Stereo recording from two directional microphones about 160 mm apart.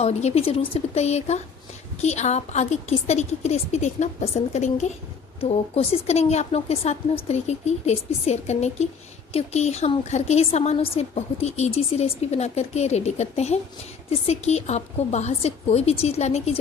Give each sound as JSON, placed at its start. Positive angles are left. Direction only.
{"t": 0.0, "sound": "a woman's voice", "side_deg": 40}